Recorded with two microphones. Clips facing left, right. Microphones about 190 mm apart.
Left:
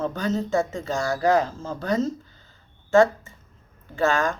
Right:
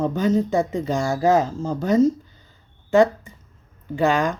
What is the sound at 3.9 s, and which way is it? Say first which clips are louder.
Speech: right 3 dB; 20° right (ahead or behind).